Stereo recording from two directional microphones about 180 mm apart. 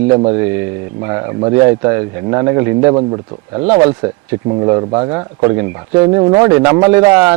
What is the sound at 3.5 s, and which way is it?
Speech, 30° right (ahead or behind).